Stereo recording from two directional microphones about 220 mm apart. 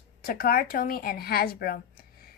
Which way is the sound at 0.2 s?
40° left (ahead or behind).